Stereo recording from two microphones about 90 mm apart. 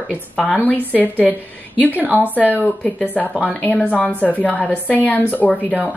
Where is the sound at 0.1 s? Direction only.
15° left (ahead or behind).